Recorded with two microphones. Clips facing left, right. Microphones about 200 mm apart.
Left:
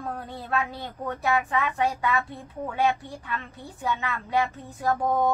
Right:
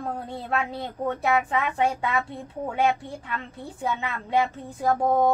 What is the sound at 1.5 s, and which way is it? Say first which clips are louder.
Speech: right 1 dB; 25° right (ahead or behind).